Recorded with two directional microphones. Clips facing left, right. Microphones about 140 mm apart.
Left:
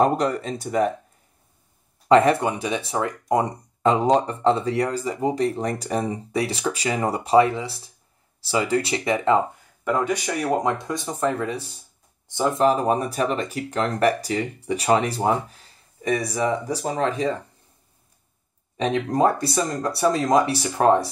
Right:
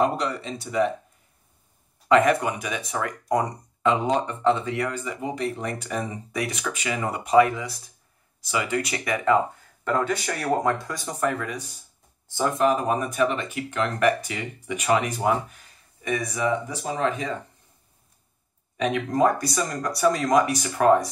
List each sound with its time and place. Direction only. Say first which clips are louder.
0.0 s speech: left 4 dB; 45° left (ahead or behind)
2.0 s speech: left 3 dB; 30° left (ahead or behind)
3.8 s speech: left 4 dB; 40° left (ahead or behind)
9.8 s speech: left 2 dB; 15° left (ahead or behind)
12.3 s speech: left 2 dB; 20° left (ahead or behind)
12.5 s speech: left 3 dB; 35° left (ahead or behind)
18.8 s speech: left 1 dB; 30° left (ahead or behind)